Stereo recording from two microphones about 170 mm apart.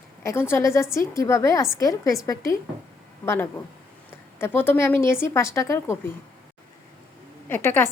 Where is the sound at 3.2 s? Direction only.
15° left (ahead or behind).